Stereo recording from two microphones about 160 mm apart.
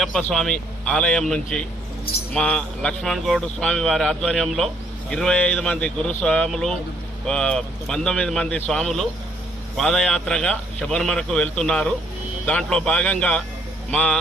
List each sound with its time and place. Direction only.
0.0 s a man's voice: centre (ahead or behind)